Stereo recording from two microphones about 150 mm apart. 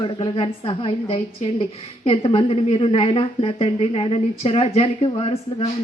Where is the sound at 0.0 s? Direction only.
35° left (ahead or behind).